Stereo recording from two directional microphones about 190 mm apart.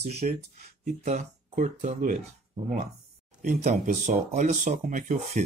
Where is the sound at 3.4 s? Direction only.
35° right (ahead or behind).